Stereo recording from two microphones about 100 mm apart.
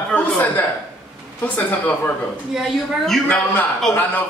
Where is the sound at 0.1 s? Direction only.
15° left (ahead or behind).